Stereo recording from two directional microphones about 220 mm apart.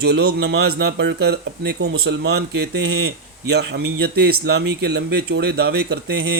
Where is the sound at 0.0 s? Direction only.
45° right (ahead or behind).